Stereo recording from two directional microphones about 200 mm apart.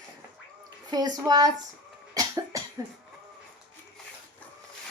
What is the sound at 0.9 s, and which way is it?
Speech, 20° right (ahead or behind).